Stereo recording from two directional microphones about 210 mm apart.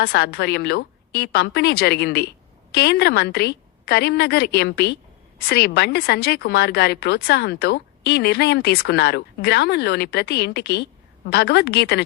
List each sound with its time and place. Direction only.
0.0 s speech: 50° left (ahead or behind)